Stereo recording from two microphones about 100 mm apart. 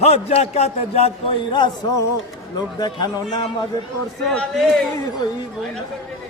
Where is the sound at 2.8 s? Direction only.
45° left (ahead or behind).